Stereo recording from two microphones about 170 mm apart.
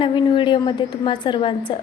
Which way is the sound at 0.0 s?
30° left (ahead or behind).